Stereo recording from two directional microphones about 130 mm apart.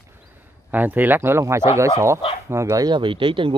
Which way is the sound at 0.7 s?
15° right (ahead or behind).